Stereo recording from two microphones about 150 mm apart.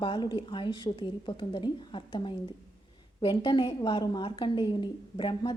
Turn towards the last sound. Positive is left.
turn(degrees=30)  # may be behind; listen again after turning